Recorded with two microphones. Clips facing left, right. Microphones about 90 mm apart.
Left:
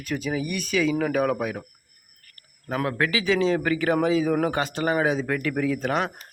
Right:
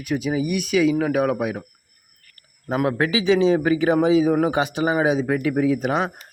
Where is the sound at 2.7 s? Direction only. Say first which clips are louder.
Right 4 dB; 20° right (ahead or behind).